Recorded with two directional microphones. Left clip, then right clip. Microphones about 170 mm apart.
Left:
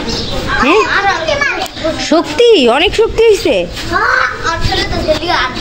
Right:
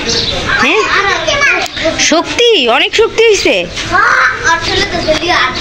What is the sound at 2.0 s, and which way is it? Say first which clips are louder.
A woman's voice: even; 20° left (ahead or behind).